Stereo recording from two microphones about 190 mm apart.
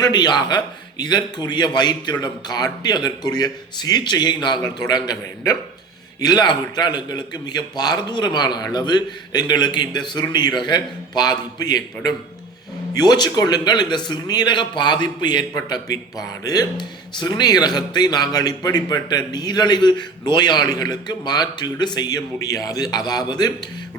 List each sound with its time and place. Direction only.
0.0 s a man's voice: 20° left (ahead or behind)